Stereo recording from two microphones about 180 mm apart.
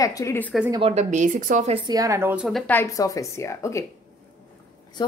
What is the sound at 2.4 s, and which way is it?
A woman's voice, 5° left (ahead or behind).